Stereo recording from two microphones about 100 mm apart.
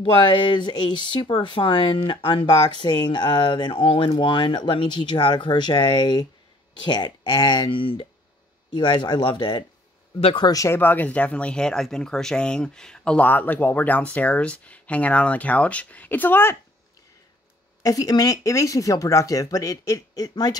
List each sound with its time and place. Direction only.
0.0 s speech: 55° left (ahead or behind)
1.3 s speech: 60° left (ahead or behind)
8.6 s speech: 50° left (ahead or behind)
10.7 s speech: 20° left (ahead or behind)
17.8 s speech: 35° left (ahead or behind)